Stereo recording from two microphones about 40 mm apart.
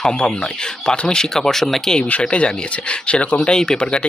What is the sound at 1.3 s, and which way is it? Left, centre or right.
Speech, centre.